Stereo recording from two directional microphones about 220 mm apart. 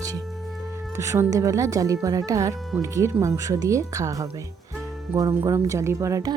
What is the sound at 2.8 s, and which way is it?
A woman's voice, 15° right (ahead or behind).